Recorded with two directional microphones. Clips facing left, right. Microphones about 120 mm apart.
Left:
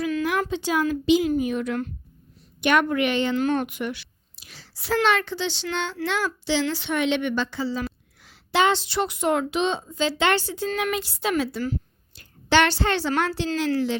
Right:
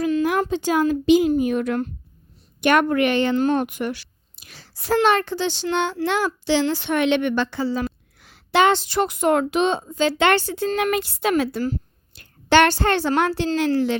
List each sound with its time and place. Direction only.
0.2 s a woman's voice: 40° right (ahead or behind)
3.3 s a woman's voice: 35° right (ahead or behind); by 13.5 s 55° right (ahead or behind)